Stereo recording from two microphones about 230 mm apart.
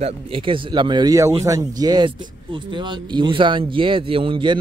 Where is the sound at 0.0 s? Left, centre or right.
Right.